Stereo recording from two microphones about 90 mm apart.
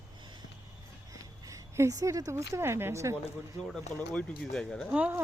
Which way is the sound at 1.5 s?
35° right (ahead or behind).